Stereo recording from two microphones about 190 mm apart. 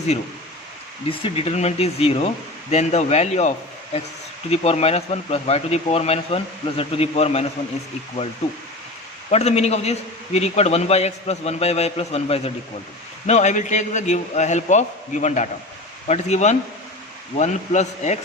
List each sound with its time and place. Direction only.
1.2 s a man's voice: 35° left (ahead or behind)
9.3 s a man's voice: 35° left (ahead or behind)